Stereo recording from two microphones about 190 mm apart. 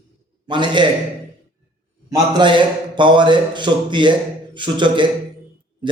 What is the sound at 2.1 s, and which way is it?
Speech, 25° right (ahead or behind).